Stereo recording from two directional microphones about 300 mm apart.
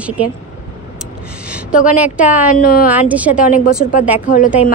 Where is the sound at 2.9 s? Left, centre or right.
Centre.